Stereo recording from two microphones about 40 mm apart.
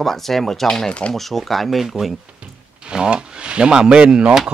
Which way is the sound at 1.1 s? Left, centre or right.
Centre.